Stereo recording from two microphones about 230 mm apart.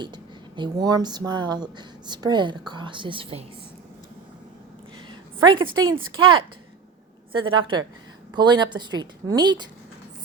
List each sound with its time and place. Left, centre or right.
0.0 s speech: centre
5.0 s a sound: right
5.8 s speech: centre
7.4 s speech: right